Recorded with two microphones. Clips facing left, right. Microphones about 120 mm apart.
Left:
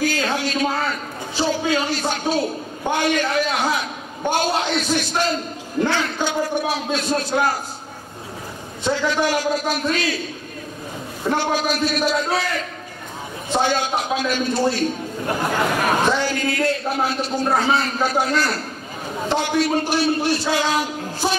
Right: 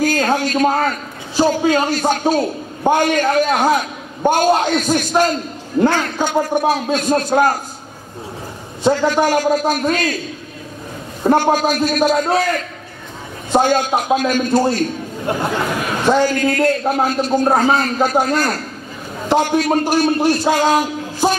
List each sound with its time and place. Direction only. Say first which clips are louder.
0.0 s a man's voice: right 5 dB; 45° right (ahead or behind)
8.8 s a man's voice: right 6 dB; 45° right (ahead or behind)
11.2 s a man's voice: right 7 dB; 45° right (ahead or behind)
16.1 s a man's voice: right 6 dB; 45° right (ahead or behind)